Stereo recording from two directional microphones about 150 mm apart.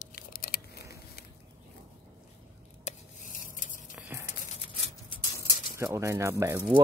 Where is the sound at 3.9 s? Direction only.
10° right (ahead or behind).